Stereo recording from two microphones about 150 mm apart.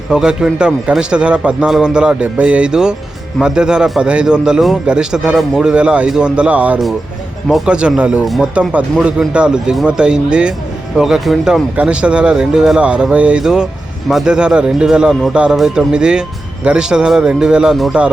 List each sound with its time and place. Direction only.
0.1 s a man's voice: 5° right (ahead or behind)